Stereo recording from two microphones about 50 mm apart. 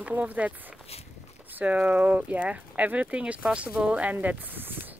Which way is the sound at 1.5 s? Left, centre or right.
Right.